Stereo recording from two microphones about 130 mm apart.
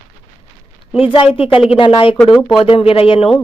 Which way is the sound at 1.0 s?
45° left (ahead or behind).